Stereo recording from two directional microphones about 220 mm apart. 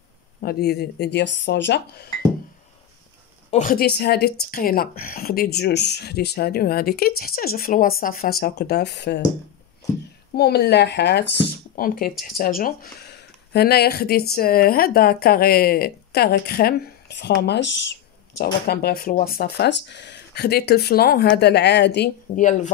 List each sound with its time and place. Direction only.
0.4 s speech: 45° left (ahead or behind)
3.4 s speech: 35° left (ahead or behind); by 9.2 s 50° left (ahead or behind)
10.3 s speech: 45° left (ahead or behind)
11.7 s speech: 40° left (ahead or behind)
22.4 s speech: 35° left (ahead or behind)